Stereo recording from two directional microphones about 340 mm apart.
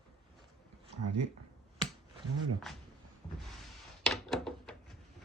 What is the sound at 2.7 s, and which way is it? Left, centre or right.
Speech, centre.